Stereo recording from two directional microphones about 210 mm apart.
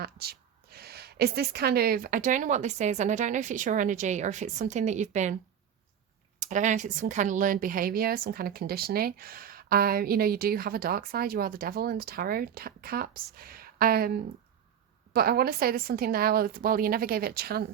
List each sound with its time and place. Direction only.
0.0 s a woman's voice: 45° right (ahead or behind)
6.4 s speech: 35° right (ahead or behind)